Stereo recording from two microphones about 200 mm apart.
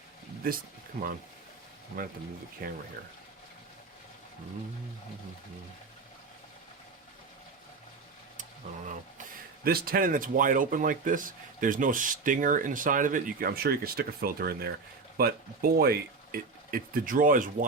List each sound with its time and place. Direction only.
0.4 s speech: 45° right (ahead or behind)
2.6 s speech: 45° right (ahead or behind)
9.6 s speech: 45° right (ahead or behind)